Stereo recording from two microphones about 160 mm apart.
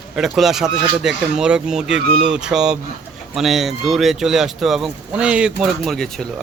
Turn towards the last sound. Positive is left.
turn(degrees=0)  # may be behind; listen again after turning